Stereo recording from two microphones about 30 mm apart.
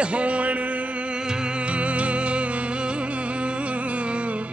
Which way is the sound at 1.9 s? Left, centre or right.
Right.